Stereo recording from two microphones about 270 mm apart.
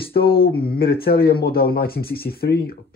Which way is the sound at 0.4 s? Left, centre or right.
Left.